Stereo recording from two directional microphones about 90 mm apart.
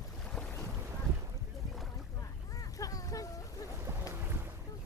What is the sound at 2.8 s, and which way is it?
Vehicle, 40° left (ahead or behind).